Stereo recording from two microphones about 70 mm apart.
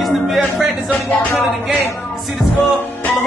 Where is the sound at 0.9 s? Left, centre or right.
Centre.